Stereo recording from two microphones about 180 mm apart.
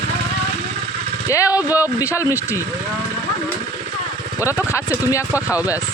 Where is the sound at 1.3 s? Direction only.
20° left (ahead or behind).